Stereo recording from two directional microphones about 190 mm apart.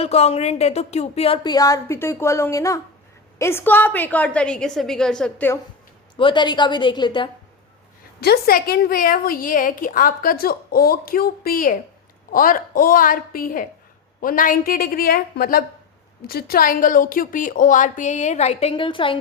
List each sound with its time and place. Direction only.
0.0 s speech: 35° left (ahead or behind)
1.5 s a woman's voice: 20° left (ahead or behind)
6.1 s a woman's voice: 25° left (ahead or behind)
8.2 s a woman's voice: 55° left (ahead or behind); by 19.1 s 25° left (ahead or behind)